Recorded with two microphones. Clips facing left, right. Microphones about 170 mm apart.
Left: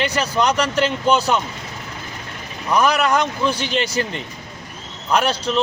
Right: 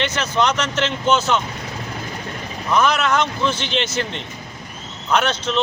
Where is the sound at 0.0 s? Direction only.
35° left (ahead or behind).